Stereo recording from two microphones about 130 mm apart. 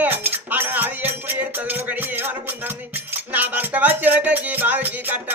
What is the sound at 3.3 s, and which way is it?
Music, 15° right (ahead or behind).